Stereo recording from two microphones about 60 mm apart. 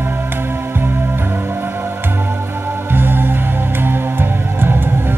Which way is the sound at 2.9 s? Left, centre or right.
Right.